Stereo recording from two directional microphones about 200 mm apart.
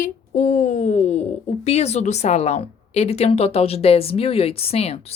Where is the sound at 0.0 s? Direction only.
40° left (ahead or behind).